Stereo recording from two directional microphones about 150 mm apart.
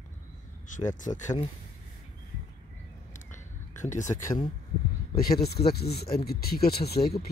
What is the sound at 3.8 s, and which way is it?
Speech, 55° left (ahead or behind).